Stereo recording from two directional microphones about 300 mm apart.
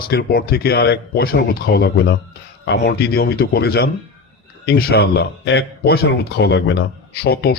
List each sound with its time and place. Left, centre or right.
0.1 s speech: left